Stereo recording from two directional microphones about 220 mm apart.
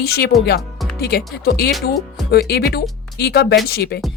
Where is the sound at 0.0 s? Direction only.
45° left (ahead or behind).